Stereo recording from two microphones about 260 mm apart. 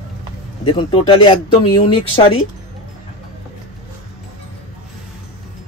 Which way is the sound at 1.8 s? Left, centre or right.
Left.